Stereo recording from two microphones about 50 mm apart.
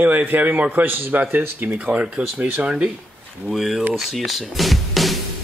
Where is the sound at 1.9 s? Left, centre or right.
Right.